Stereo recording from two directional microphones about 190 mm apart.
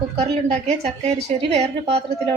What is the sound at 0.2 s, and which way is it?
A woman's voice, 35° right (ahead or behind).